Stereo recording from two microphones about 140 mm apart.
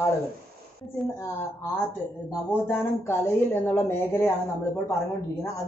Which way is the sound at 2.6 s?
20° left (ahead or behind).